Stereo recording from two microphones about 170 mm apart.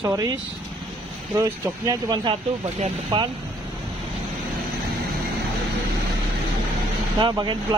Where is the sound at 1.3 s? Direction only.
20° right (ahead or behind).